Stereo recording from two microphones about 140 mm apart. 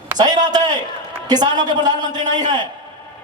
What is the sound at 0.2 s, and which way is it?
A man's voice, 30° right (ahead or behind).